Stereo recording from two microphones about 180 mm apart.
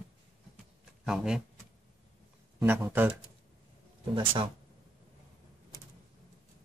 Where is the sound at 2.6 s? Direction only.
10° right (ahead or behind).